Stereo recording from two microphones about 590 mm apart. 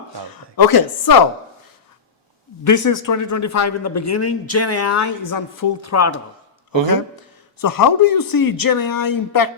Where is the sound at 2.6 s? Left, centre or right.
Left.